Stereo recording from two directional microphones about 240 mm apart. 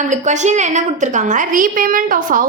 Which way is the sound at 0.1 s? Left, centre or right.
Right.